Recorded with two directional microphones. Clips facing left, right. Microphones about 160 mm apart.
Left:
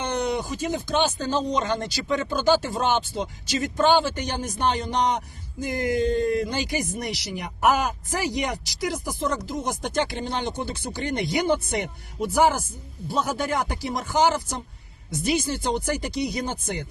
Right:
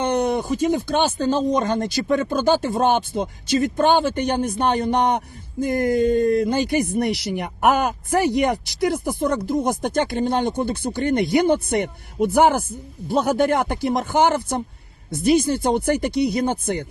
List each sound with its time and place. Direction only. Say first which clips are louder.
0.0 s speech: right 5 dB; 55° right (ahead or behind)